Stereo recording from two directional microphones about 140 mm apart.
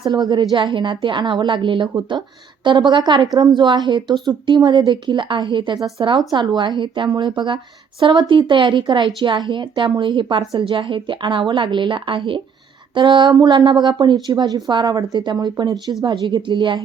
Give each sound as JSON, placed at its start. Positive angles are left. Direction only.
{"t": 0.0, "sound": "a woman's voice", "side_deg": -30}